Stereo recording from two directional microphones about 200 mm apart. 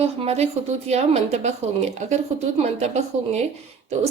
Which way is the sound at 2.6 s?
35° right (ahead or behind).